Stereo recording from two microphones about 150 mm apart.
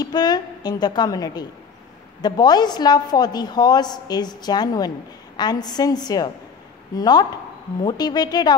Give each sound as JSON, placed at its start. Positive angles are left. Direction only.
{"t": 0.0, "sound": "a woman's voice", "side_deg": 25}